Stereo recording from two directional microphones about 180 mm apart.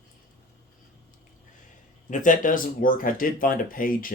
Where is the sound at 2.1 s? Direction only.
45° left (ahead or behind).